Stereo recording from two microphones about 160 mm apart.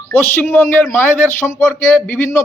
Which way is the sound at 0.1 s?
10° left (ahead or behind).